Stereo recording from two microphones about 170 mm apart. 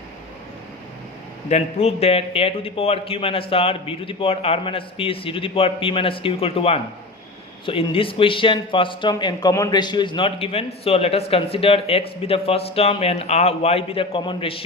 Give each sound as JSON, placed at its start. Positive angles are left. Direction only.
{"t": 1.5, "sound": "a man's voice", "side_deg": 40}